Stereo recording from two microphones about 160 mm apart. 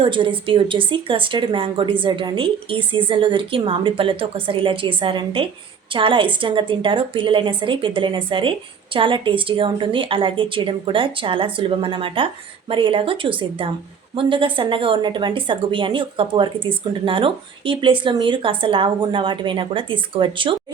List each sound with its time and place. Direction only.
0.0 s a woman's voice: 30° right (ahead or behind)